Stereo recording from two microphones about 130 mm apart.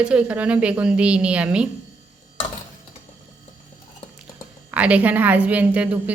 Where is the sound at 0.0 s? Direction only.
10° right (ahead or behind).